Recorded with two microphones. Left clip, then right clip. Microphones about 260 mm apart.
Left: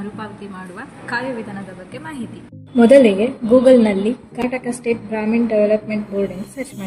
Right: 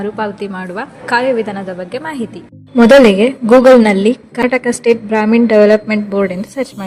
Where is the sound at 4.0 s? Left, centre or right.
Right.